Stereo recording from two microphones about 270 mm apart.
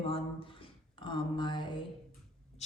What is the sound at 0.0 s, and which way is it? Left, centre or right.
A woman's voice, centre.